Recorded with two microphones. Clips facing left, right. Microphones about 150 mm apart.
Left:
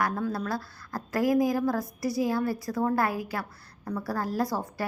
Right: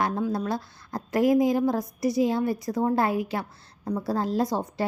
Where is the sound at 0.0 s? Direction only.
20° right (ahead or behind).